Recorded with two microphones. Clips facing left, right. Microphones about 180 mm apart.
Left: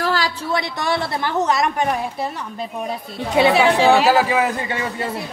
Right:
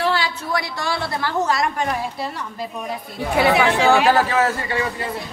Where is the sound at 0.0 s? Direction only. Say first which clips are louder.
Even; 40° left (ahead or behind).